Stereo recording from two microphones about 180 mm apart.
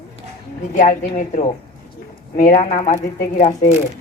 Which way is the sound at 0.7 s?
50° left (ahead or behind).